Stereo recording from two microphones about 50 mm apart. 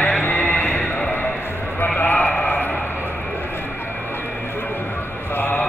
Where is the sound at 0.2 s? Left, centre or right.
Left.